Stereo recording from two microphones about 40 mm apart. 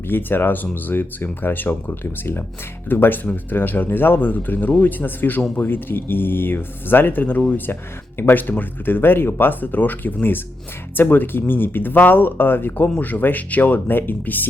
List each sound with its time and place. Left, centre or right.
0.1 s speech: left
2.9 s speech: left
5.6 s speech: left
13.0 s speech: left
13.7 s speech: left